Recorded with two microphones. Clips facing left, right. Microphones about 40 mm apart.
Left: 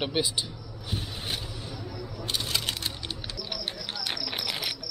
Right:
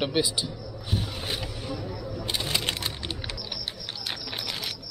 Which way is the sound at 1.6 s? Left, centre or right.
Right.